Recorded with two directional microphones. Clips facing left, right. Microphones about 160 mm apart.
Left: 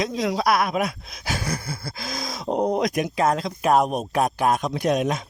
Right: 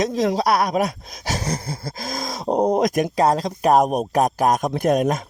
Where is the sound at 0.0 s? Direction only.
40° right (ahead or behind).